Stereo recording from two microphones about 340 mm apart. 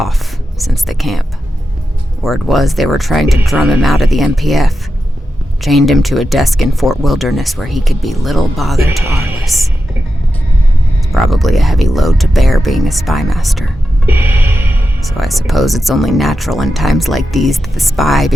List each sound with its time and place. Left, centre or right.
0.6 s speech: centre
2.2 s speech: centre
11.1 s speech: centre